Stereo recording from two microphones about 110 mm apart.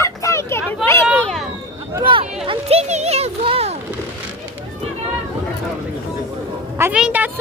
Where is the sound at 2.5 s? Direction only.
65° right (ahead or behind).